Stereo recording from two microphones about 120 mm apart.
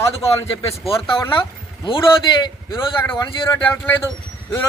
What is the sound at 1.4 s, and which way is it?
Speech, 45° left (ahead or behind).